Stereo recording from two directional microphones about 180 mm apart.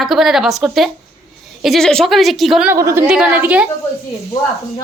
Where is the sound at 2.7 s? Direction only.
15° right (ahead or behind).